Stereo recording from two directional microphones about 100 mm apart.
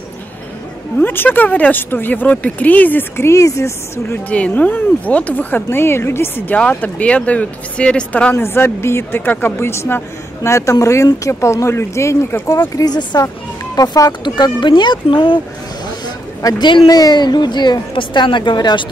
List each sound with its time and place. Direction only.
0.9 s speech: 20° left (ahead or behind)
4.3 s speech: 15° left (ahead or behind)
12.7 s a woman's voice: 45° left (ahead or behind)
14.2 s a woman's voice: 50° left (ahead or behind)
16.4 s a woman's voice: 50° left (ahead or behind)